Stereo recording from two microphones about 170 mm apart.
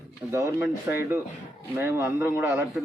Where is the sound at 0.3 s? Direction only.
15° right (ahead or behind).